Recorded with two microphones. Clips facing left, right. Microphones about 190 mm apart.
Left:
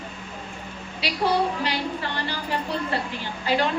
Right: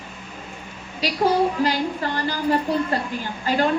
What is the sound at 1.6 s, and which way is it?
Music, 40° right (ahead or behind).